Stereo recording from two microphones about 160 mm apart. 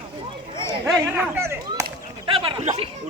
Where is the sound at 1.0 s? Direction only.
15° right (ahead or behind).